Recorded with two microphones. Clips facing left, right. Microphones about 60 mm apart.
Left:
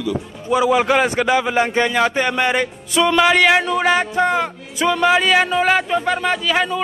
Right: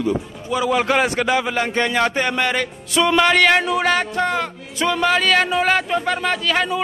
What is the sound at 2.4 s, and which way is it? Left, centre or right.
Speech, centre.